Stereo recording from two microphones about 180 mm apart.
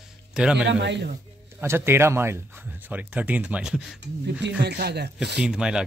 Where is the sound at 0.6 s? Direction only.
75° right (ahead or behind).